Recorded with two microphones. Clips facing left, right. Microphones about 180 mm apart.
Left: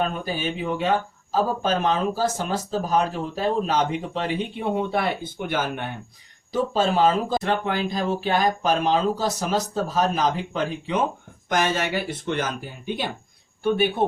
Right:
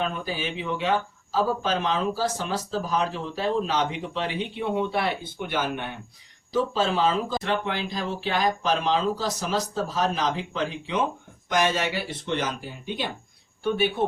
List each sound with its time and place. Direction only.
0.0 s speech: 45° left (ahead or behind)